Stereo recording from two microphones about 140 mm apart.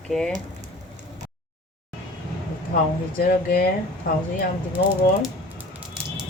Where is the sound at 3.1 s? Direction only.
90° left.